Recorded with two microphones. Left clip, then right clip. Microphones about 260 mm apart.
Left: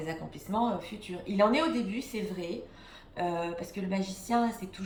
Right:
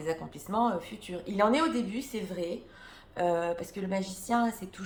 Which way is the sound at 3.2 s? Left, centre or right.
Centre.